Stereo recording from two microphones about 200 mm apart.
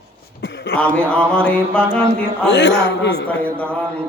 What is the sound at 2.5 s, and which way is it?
Speech, 65° left (ahead or behind).